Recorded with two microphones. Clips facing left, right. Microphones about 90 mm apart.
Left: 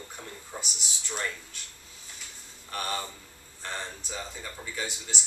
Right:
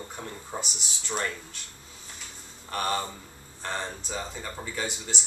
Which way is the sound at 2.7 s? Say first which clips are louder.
Right 5 dB; 35° right (ahead or behind).